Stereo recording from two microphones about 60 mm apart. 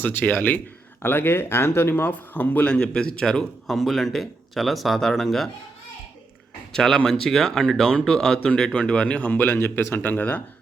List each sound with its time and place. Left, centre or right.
0.0 s speech: left
2.6 s a man's voice: centre
6.7 s speech: centre; by 9.6 s left
9.6 s speech: left